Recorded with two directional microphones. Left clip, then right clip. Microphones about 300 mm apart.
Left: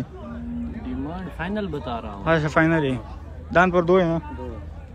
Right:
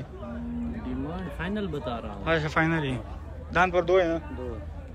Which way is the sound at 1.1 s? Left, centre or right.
Centre.